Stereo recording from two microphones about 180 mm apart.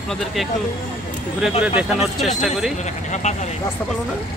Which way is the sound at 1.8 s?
5° right (ahead or behind).